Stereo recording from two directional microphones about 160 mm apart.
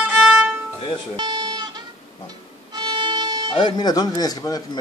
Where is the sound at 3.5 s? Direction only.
30° left (ahead or behind).